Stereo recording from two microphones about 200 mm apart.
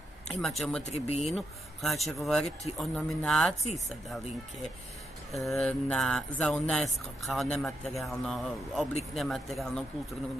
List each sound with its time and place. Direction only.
0.4 s speech: centre (ahead or behind)
0.8 s speech: 30° left (ahead or behind)
1.3 s speech: centre (ahead or behind)
5.3 s speech: centre (ahead or behind)